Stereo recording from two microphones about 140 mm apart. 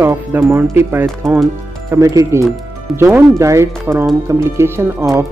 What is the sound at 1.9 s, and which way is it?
Speech, 25° right (ahead or behind).